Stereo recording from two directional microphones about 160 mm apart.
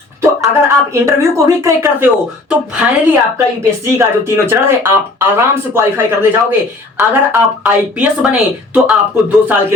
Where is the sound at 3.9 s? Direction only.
15° right (ahead or behind).